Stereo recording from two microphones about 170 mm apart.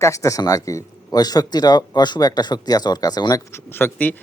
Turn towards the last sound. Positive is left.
turn(degrees=10)  # may be behind; listen again after turning